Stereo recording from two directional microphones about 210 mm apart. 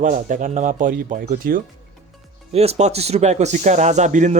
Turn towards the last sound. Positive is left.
turn(degrees=-35)  # may be behind; listen again after turning